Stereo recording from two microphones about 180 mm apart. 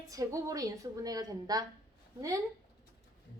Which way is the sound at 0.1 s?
20° right (ahead or behind).